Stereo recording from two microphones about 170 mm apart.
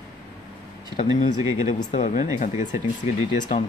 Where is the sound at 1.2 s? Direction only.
45° left (ahead or behind).